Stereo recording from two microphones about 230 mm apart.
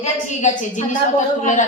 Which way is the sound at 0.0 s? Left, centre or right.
Left.